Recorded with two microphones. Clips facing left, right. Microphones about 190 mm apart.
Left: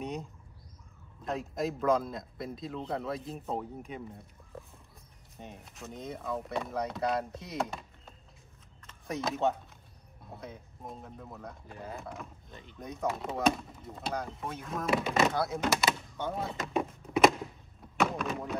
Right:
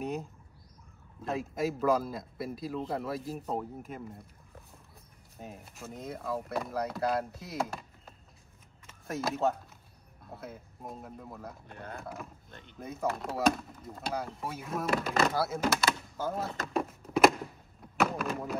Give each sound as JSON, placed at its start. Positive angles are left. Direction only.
{"t": 0.0, "sound": "speech", "side_deg": 0}
{"t": 5.4, "sound": "speech", "side_deg": 0}
{"t": 17.9, "sound": "a sound", "side_deg": 0}